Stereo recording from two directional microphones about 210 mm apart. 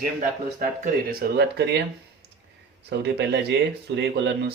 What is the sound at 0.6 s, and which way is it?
Speech, 40° right (ahead or behind).